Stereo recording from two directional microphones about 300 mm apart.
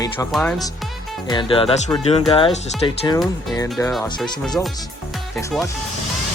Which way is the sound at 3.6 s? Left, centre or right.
Centre.